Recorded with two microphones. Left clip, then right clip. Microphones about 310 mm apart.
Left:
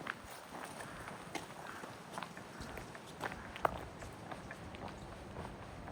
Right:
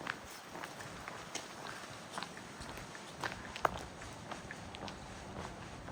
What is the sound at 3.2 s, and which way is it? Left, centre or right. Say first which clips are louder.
Walk: right 1 dB; centre.